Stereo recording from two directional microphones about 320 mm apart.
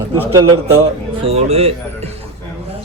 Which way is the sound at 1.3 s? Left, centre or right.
Centre.